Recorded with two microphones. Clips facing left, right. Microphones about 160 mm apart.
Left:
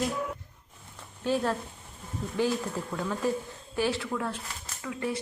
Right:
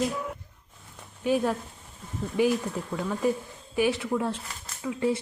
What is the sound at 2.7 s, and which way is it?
Speech, 5° right (ahead or behind).